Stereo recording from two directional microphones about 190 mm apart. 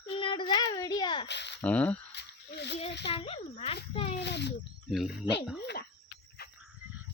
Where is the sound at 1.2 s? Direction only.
65° left (ahead or behind).